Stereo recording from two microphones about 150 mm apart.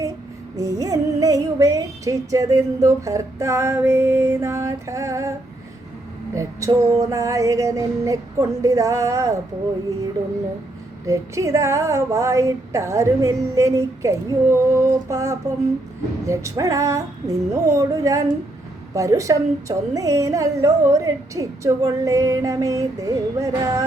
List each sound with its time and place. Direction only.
0.5 s a woman's voice: 25° right (ahead or behind)
6.3 s a woman's voice: 20° right (ahead or behind)
11.0 s a woman's voice: 20° right (ahead or behind)